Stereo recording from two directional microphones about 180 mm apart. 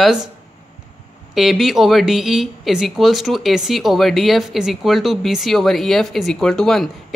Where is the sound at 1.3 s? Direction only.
Centre (ahead or behind).